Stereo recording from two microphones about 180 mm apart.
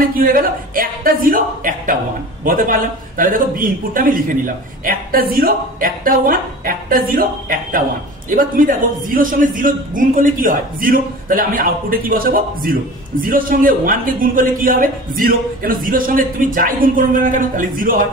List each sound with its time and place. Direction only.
0.1 s a man's voice: 55° right (ahead or behind)